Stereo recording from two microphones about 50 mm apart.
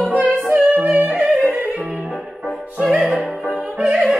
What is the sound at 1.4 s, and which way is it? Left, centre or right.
Music, right.